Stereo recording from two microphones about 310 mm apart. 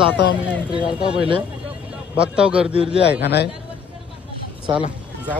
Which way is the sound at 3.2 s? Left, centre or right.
Left.